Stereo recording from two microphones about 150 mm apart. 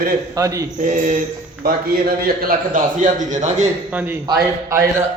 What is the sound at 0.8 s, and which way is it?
Speech, 60° right (ahead or behind).